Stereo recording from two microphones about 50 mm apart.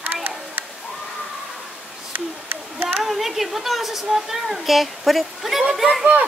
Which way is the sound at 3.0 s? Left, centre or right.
Centre.